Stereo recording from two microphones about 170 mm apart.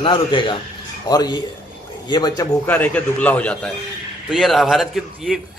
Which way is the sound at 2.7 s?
10° left (ahead or behind).